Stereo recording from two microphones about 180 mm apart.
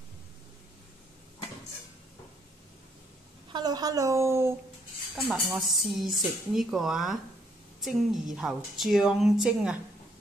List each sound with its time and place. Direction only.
3.5 s a woman's voice: 25° right (ahead or behind)
5.1 s speech: centre (ahead or behind)